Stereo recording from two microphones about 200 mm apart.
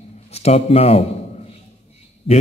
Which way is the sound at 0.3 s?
30° left (ahead or behind).